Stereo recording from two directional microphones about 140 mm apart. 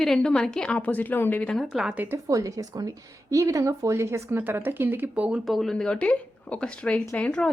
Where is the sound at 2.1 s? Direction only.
25° right (ahead or behind).